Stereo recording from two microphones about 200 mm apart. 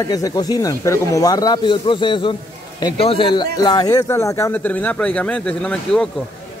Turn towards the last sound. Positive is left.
turn(degrees=5)  # may be behind; listen again after turning